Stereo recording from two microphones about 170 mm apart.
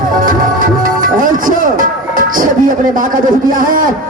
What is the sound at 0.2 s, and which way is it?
Music, 55° right (ahead or behind).